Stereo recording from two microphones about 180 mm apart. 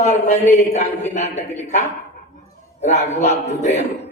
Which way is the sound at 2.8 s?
40° left (ahead or behind).